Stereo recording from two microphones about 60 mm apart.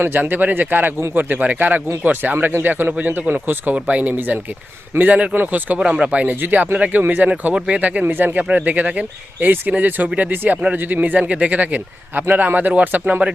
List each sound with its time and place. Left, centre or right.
0.0 s speech: right
3.8 s speech: right
4.1 s speech: right